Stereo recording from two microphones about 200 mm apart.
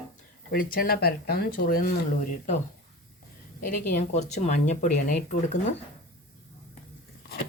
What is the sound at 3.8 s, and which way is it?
Speech, 35° left (ahead or behind).